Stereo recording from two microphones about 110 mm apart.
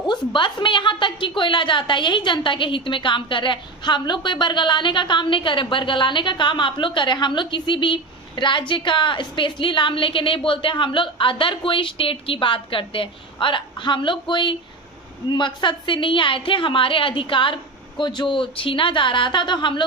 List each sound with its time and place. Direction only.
0.1 s a woman's voice: 45° left (ahead or behind)